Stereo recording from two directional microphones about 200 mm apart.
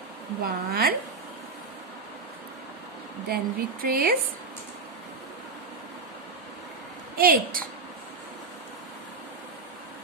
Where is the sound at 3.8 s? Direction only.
45° right (ahead or behind).